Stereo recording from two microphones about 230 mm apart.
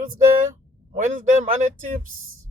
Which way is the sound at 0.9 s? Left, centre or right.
Right.